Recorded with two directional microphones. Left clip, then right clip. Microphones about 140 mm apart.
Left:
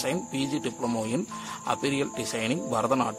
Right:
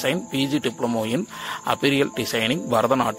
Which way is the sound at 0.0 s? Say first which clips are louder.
Right 6 dB; 25° right (ahead or behind).